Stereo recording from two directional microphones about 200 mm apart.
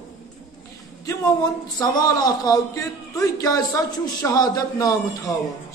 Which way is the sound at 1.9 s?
20° left (ahead or behind).